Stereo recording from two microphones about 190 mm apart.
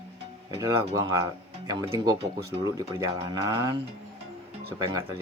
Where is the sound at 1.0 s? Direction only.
20° right (ahead or behind).